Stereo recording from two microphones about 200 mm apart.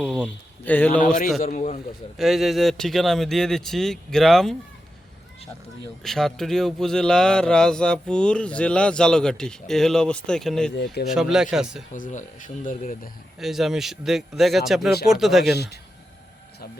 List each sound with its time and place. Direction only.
0.0 s speech: centre (ahead or behind)
1.0 s a man's voice: 40° left (ahead or behind)
2.1 s speech: centre (ahead or behind)
6.0 s speech: centre (ahead or behind)
11.9 s speech: 40° left (ahead or behind)
13.4 s speech: centre (ahead or behind)
15.5 s speech: 55° left (ahead or behind)